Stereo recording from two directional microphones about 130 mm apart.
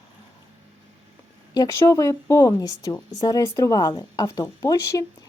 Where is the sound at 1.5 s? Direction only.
30° left (ahead or behind).